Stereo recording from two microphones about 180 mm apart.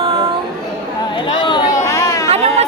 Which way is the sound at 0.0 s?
30° right (ahead or behind).